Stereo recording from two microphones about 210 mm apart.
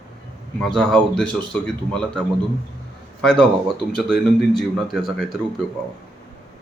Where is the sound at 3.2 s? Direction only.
5° left (ahead or behind).